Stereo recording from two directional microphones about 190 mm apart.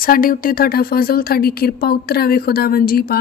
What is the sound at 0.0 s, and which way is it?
A woman's voice, 50° left (ahead or behind).